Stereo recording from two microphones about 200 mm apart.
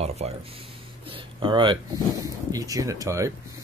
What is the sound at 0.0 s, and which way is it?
Speech, 30° right (ahead or behind).